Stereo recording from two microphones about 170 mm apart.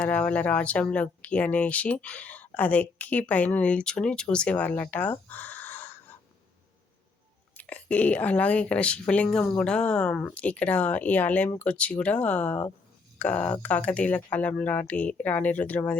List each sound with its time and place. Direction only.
0.0 s speech: 10° left (ahead or behind)
7.5 s speech: 10° left (ahead or behind)